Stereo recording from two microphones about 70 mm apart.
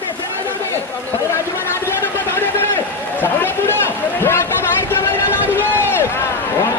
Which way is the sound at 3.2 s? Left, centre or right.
Left.